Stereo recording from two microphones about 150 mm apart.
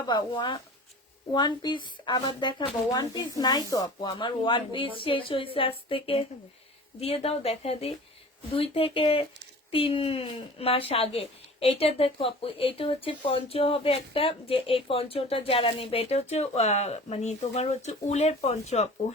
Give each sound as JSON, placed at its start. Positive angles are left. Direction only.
{"t": 0.1, "sound": "speech", "side_deg": 30}